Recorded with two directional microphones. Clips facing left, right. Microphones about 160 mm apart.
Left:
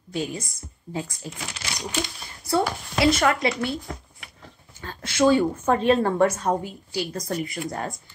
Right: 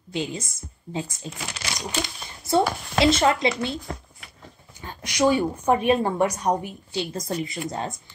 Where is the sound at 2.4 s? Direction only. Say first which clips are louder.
Right 2 dB; 25° right (ahead or behind).